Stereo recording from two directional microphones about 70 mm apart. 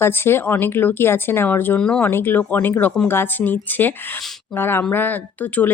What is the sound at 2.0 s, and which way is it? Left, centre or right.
Speech, left.